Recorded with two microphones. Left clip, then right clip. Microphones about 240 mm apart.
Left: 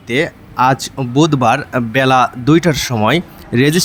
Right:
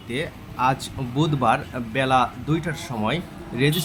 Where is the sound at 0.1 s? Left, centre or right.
Left.